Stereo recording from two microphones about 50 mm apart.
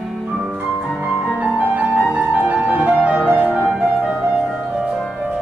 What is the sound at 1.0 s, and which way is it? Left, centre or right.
Music, right.